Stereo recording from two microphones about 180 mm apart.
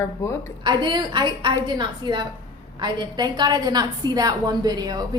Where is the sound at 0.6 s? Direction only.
25° right (ahead or behind).